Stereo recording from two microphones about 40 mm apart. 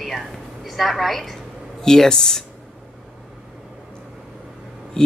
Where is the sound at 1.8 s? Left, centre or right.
Centre.